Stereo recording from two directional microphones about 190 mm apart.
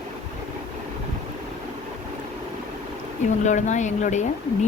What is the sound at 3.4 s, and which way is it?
Speech, 40° left (ahead or behind).